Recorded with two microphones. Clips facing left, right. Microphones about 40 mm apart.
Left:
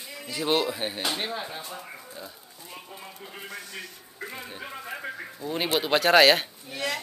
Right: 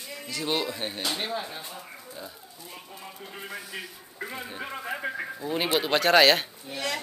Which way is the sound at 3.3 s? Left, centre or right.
Centre.